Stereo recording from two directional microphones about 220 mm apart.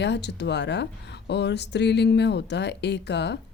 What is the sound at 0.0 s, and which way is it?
Speech, 50° left (ahead or behind).